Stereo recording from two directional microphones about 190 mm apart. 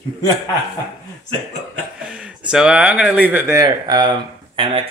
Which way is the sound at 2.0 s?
5° right (ahead or behind).